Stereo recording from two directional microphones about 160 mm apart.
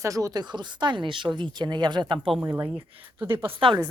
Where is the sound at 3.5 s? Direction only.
30° right (ahead or behind).